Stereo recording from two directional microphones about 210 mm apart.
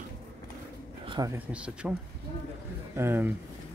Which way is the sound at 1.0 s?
20° right (ahead or behind).